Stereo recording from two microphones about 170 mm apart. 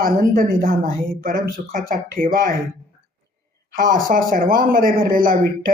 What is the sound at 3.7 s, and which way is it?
Speech, 55° right (ahead or behind).